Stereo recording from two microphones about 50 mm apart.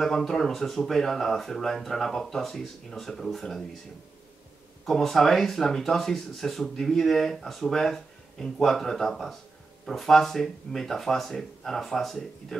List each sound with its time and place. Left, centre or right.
0.0 s speech: centre
4.8 s speech: centre